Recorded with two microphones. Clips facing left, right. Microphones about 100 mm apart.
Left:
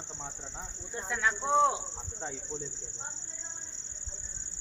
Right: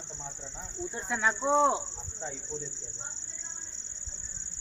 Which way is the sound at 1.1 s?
25° right (ahead or behind).